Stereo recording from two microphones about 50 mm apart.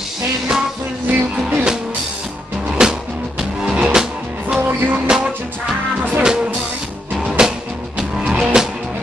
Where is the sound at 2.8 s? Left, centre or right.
Centre.